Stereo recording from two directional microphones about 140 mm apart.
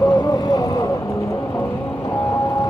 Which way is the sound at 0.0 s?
30° left (ahead or behind).